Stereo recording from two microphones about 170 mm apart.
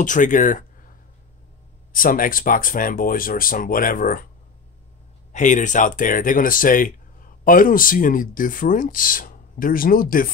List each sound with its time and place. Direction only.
0.0 s speech: 50° left (ahead or behind)
1.9 s speech: 55° left (ahead or behind)
5.3 s speech: 45° left (ahead or behind)